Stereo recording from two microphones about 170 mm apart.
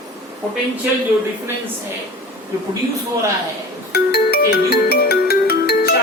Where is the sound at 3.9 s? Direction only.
65° left (ahead or behind).